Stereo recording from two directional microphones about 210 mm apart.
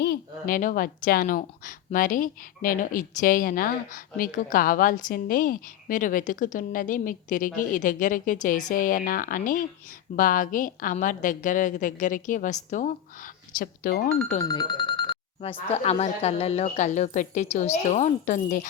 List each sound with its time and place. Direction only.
0.0 s a woman's voice: 45° left (ahead or behind)
14.4 s a woman's voice: 20° left (ahead or behind); by 18.7 s 35° left (ahead or behind)